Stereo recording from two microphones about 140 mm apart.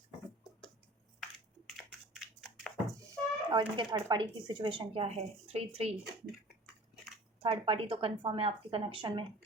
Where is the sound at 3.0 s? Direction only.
25° right (ahead or behind).